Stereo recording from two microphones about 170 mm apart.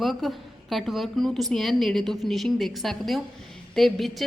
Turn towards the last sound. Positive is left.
turn(degrees=0)  # may be behind; listen again after turning